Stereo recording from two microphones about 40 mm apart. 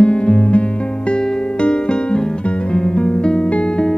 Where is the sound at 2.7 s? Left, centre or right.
Left.